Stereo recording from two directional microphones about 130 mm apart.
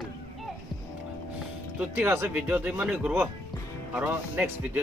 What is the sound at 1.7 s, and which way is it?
Speech, 10° right (ahead or behind).